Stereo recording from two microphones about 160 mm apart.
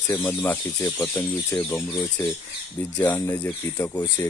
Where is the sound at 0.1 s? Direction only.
10° left (ahead or behind).